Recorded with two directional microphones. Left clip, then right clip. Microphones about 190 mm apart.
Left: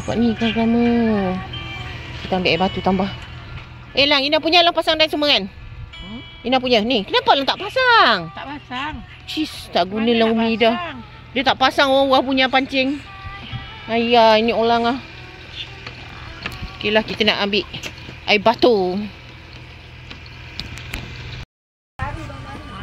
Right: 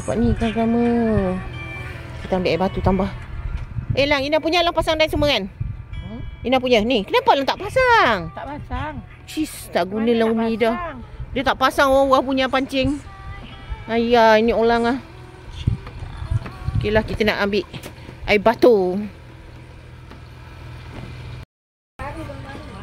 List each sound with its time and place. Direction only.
0.0 s speech: 5° left (ahead or behind)
0.3 s speech: 30° left (ahead or behind)
2.2 s speech: centre (ahead or behind)
8.4 s speech: 20° right (ahead or behind)
9.4 s speech: 5° right (ahead or behind)
16.7 s speech: 5° right (ahead or behind)